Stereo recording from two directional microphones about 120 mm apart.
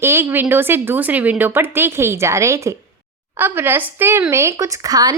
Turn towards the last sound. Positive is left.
turn(degrees=-30)  # may be behind; listen again after turning